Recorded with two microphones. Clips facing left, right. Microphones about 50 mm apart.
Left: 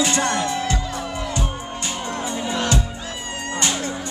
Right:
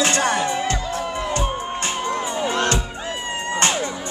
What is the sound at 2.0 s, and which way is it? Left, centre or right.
Music, right.